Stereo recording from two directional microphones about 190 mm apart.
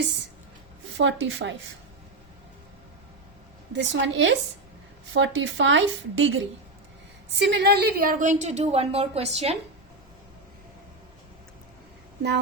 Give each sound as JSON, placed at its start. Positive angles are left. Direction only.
{"t": 0.9, "sound": "speech", "side_deg": -75}
{"t": 3.7, "sound": "speech", "side_deg": -70}
{"t": 7.3, "sound": "a woman's voice", "side_deg": -60}